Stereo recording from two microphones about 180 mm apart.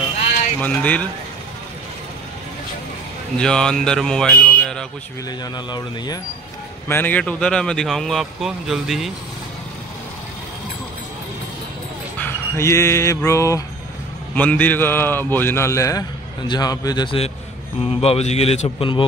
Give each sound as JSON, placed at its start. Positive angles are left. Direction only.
{"t": 0.6, "sound": "speech", "side_deg": 10}
{"t": 3.3, "sound": "speech", "side_deg": 5}
{"t": 5.4, "sound": "a man's voice", "side_deg": 20}
{"t": 6.9, "sound": "speech", "side_deg": 10}
{"t": 12.2, "sound": "dog", "side_deg": 15}
{"t": 14.3, "sound": "speech", "side_deg": 10}